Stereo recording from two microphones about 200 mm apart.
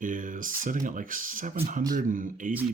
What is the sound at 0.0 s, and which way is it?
Speech, 40° right (ahead or behind).